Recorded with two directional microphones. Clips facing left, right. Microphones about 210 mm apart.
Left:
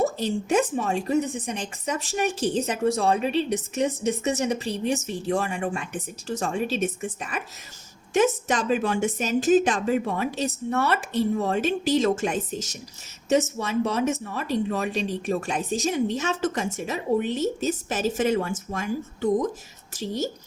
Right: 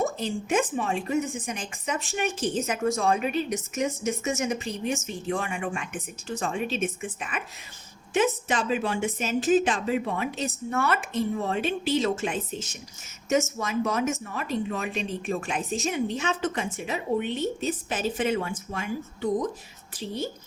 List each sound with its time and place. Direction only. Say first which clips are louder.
0.0 s a woman's voice: left 3 dB; 35° left (ahead or behind)
13.2 s a woman's voice: left 3 dB; 30° left (ahead or behind)